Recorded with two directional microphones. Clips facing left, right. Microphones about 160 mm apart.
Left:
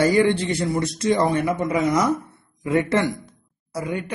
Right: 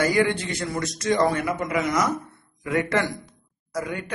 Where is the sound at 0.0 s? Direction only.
30° left (ahead or behind).